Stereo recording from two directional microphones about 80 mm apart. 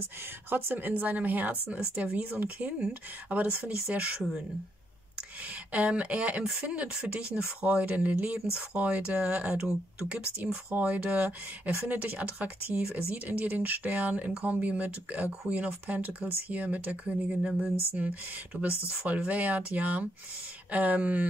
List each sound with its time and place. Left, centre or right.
0.5 s speech: right
5.7 s speech: centre